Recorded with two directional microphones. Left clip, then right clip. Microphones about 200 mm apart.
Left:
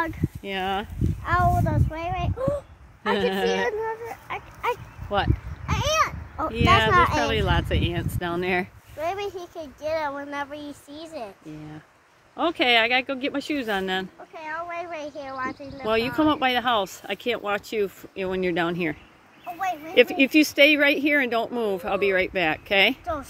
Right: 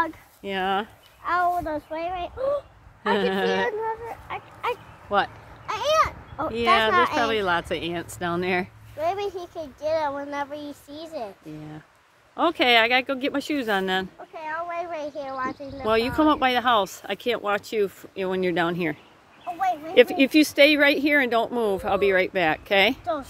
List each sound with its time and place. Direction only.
0.4 s speech: centre (ahead or behind)
1.2 s a child's voice: 55° left (ahead or behind)
3.1 s speech: 5° left (ahead or behind)
3.8 s a sound: 45° left (ahead or behind)
5.1 s speech: 5° left (ahead or behind)
5.7 s a sound: 25° left (ahead or behind)
6.9 s a child's voice: 45° left (ahead or behind)
7.3 s speech: 5° left (ahead or behind)
12.4 s speech: centre (ahead or behind)